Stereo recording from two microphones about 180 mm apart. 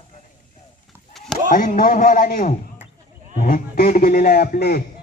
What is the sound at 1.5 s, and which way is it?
A man's voice, 45° left (ahead or behind).